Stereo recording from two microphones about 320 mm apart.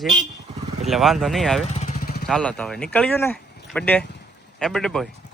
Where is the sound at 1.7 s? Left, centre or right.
Left.